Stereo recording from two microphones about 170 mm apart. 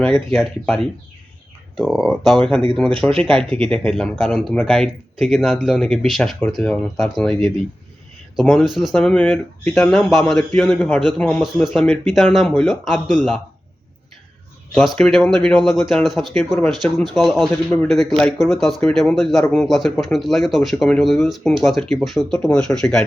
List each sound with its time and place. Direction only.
0.0 s speech: 5° left (ahead or behind)
14.8 s speech: 5° left (ahead or behind)